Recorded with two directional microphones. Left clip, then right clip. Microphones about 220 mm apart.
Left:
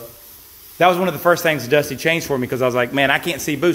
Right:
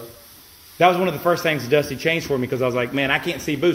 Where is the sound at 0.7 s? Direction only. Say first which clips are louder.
Left 1 dB; 30° left (ahead or behind).